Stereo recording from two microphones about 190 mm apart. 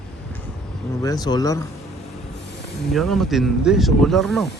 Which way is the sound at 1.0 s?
20° left (ahead or behind).